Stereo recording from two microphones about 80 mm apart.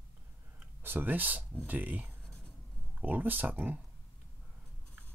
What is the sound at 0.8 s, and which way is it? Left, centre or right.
Speech, right.